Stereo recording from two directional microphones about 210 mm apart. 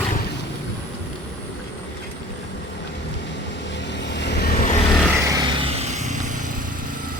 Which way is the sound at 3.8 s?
55° left (ahead or behind).